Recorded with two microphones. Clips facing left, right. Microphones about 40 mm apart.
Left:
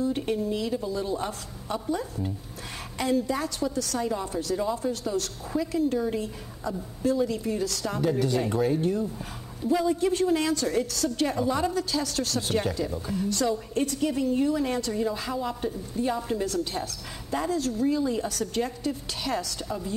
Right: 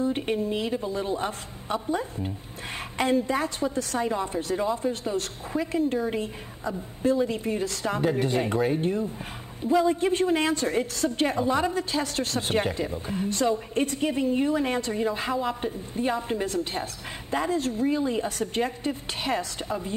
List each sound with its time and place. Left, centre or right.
0.0 s a woman's voice: right